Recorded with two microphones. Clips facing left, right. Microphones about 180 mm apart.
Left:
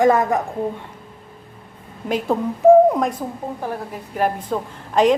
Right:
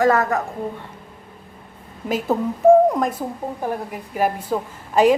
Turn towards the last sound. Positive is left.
turn(degrees=-5)  # may be behind; listen again after turning